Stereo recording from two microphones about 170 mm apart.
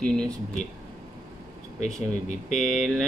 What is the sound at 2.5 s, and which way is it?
Speech, centre (ahead or behind).